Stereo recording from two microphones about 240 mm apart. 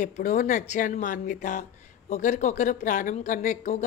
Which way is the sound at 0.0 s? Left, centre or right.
Left.